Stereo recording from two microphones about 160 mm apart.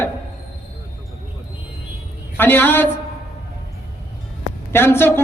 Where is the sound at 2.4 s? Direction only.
10° left (ahead or behind).